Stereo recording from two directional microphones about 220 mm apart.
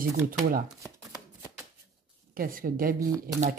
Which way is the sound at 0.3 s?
40° right (ahead or behind).